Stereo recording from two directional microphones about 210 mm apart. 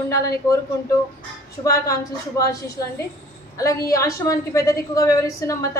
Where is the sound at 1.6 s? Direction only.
15° left (ahead or behind).